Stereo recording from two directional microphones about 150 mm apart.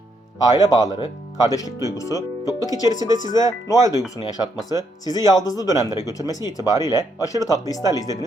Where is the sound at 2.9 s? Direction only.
55° left (ahead or behind).